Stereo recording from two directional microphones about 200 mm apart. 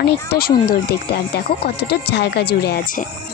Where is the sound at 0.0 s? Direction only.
50° left (ahead or behind).